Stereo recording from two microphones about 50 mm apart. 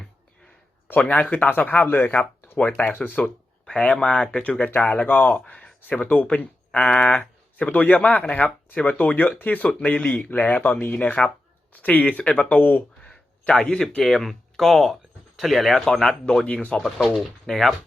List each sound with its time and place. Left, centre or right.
0.9 s speech: left
2.6 s speech: left
2.8 s speech: left
3.2 s speech: centre
12.5 s speech: left
13.0 s a sound: left
14.0 s speech: centre
17.4 s speech: centre